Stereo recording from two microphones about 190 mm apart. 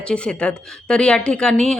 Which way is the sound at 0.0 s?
5° left (ahead or behind).